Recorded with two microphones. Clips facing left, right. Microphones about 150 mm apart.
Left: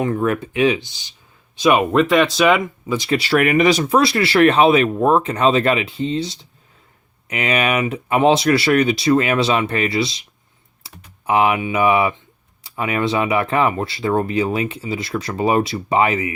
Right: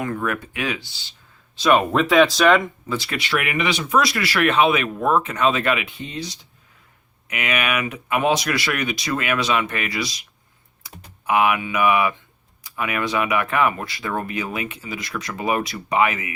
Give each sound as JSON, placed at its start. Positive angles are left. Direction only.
{"t": 0.0, "sound": "speech", "side_deg": 25}
{"t": 1.9, "sound": "speech", "side_deg": 0}
{"t": 3.1, "sound": "speech", "side_deg": 35}
{"t": 10.8, "sound": "typing", "side_deg": 30}
{"t": 11.3, "sound": "speech", "side_deg": 30}